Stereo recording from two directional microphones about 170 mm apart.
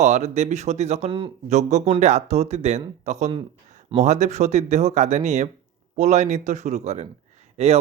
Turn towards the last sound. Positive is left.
turn(degrees=-40)  # may be behind; listen again after turning